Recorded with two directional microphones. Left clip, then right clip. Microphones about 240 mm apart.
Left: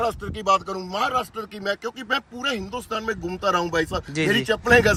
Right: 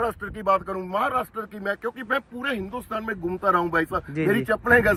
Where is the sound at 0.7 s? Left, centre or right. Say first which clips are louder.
Even; centre.